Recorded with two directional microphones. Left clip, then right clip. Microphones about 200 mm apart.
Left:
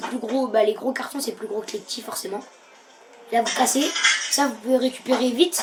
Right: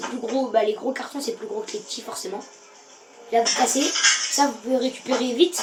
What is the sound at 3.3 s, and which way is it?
A woman's voice, 40° left (ahead or behind).